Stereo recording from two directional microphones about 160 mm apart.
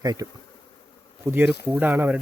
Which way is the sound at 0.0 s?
25° right (ahead or behind).